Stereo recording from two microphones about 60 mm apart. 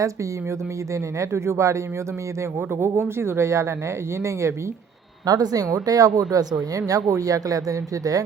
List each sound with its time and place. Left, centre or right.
1.2 s speech: right
2.8 s speech: right
5.2 s speech: right